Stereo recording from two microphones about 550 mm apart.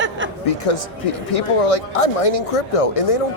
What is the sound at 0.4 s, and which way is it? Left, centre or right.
Speech, left.